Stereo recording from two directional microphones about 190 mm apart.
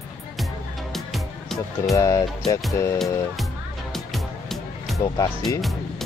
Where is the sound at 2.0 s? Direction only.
20° left (ahead or behind).